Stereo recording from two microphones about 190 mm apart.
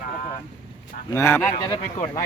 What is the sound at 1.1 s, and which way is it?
Speech, 15° left (ahead or behind).